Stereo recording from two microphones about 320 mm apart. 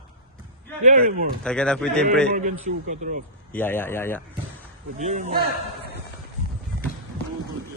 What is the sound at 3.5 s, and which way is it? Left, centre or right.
Speech, centre.